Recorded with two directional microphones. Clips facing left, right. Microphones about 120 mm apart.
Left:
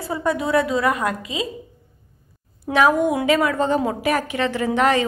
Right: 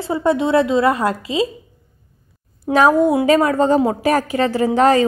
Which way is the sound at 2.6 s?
35° right (ahead or behind).